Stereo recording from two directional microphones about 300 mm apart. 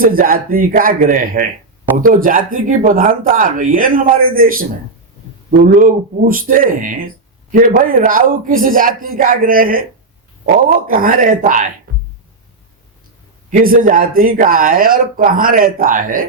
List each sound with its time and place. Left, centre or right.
0.0 s speech: right
13.5 s speech: right